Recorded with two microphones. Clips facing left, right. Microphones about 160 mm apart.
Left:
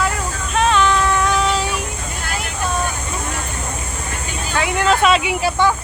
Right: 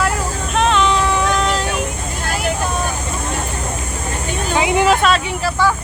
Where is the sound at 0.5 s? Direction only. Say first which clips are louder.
Even; 5° left (ahead or behind).